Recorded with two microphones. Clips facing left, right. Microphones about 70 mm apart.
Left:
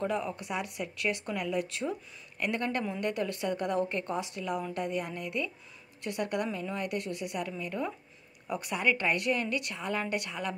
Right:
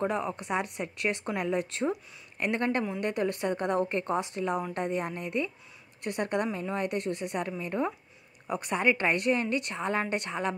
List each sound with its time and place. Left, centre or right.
0.0 s a woman's voice: right